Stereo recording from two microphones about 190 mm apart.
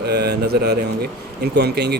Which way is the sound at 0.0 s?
60° right (ahead or behind).